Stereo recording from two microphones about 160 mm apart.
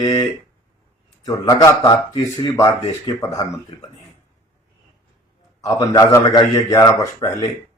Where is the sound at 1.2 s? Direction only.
20° left (ahead or behind).